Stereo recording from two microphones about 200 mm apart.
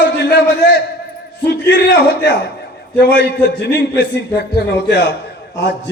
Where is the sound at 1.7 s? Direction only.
60° left (ahead or behind).